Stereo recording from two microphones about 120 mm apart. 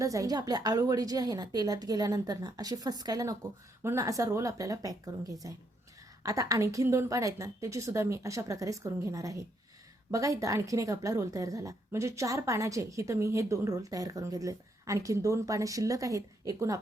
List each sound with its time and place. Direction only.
0.0 s a woman's voice: 30° right (ahead or behind)